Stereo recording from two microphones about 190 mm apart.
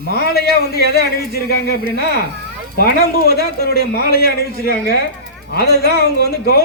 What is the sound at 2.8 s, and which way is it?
A man's voice, 55° left (ahead or behind).